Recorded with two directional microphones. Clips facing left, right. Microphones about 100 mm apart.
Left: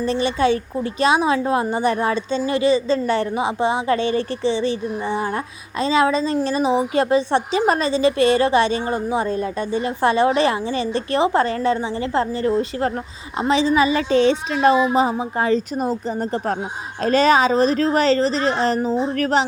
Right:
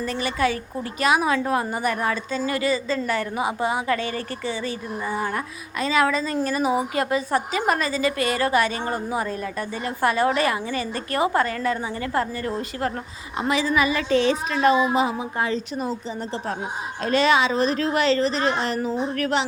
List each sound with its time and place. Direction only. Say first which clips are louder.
0.0 s a woman's voice: left 5 dB; 25° left (ahead or behind)
15.8 s speech: left 6 dB; 50° left (ahead or behind)
17.0 s a woman's voice: left 4 dB; 40° left (ahead or behind)